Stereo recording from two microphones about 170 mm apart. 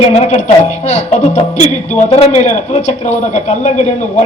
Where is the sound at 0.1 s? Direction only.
40° left (ahead or behind).